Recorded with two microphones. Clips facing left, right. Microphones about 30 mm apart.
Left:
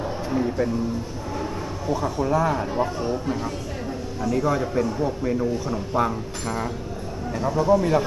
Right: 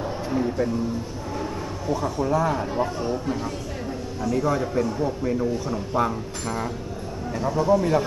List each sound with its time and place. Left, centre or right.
0.0 s music: centre
1.9 s a man's voice: centre